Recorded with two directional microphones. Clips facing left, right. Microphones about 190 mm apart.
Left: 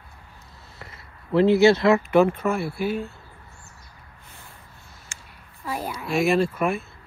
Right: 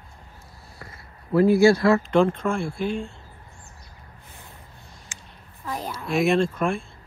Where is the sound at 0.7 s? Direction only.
25° left (ahead or behind).